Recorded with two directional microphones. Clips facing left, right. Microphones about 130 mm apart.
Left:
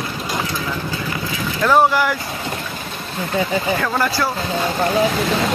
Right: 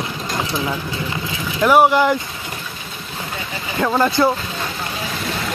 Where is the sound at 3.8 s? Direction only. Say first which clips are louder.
Right 4 dB; 20° right (ahead or behind).